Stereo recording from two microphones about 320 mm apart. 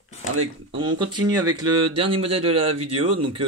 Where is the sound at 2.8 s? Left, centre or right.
Right.